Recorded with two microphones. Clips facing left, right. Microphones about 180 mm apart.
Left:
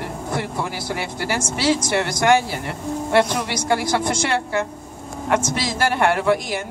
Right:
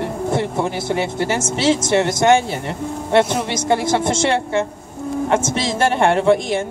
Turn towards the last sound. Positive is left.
turn(degrees=-25)  # may be behind; listen again after turning